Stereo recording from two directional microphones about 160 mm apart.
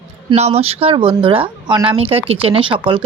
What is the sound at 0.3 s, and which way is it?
Speech, 40° right (ahead or behind).